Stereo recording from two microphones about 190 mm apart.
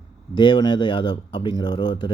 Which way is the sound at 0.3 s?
25° left (ahead or behind).